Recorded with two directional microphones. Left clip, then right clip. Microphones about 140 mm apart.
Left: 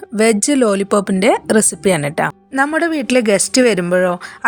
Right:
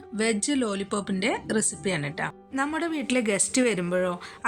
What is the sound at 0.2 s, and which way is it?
A woman's voice, 70° left (ahead or behind).